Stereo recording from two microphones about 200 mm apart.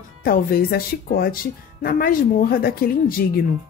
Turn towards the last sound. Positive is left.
turn(degrees=45)  # may be behind; listen again after turning